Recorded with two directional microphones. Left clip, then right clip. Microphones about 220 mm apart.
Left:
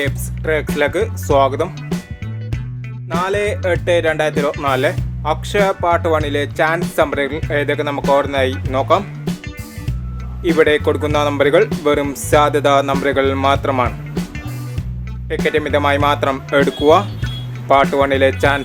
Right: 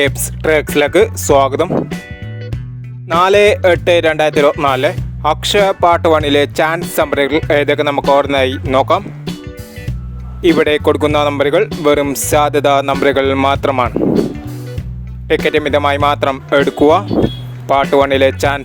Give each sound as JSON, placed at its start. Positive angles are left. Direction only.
{"t": 0.0, "sound": "speech", "side_deg": -45}
{"t": 1.7, "sound": "speech", "side_deg": 0}
{"t": 3.1, "sound": "speech", "side_deg": -40}
{"t": 9.3, "sound": "music", "side_deg": 0}
{"t": 10.6, "sound": "speech", "side_deg": -45}
{"t": 14.1, "sound": "speech", "side_deg": 0}
{"t": 15.4, "sound": "speech", "side_deg": -45}